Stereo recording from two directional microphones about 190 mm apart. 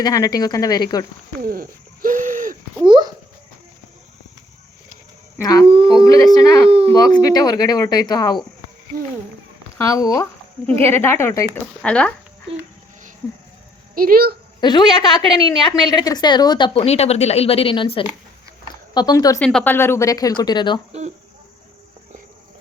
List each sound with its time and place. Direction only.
0.0 s a woman's voice: 20° left (ahead or behind)
1.5 s hoot: 45° right (ahead or behind)
2.8 s babbling: 25° right (ahead or behind)
5.4 s speech: 20° left (ahead or behind)
5.6 s speech: 30° right (ahead or behind)
6.1 s a woman's voice: 20° left (ahead or behind)
6.7 s speech: 30° right (ahead or behind)
6.9 s a woman's voice: 20° left (ahead or behind)
9.7 s speech: 15° left (ahead or behind)
13.9 s speech: 50° right (ahead or behind)
14.6 s a woman's voice: 25° left (ahead or behind)